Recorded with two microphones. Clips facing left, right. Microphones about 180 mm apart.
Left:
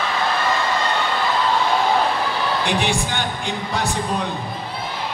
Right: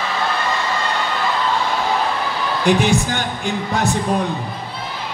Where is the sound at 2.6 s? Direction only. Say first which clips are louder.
Right 5 dB; 45° right (ahead or behind).